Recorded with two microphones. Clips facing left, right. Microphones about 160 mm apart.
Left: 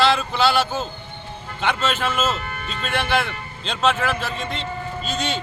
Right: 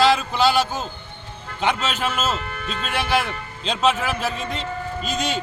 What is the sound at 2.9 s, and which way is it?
Speech, 10° right (ahead or behind).